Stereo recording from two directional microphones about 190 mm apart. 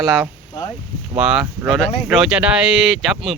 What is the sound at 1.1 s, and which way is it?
Speech, 5° right (ahead or behind).